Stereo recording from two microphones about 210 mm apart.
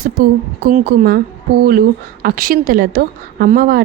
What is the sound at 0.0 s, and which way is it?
A woman's voice, 45° right (ahead or behind).